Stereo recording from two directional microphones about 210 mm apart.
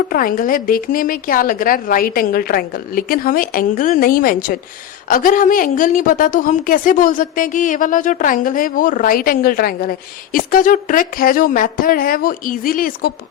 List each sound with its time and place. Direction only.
0.1 s a woman's voice: 40° left (ahead or behind)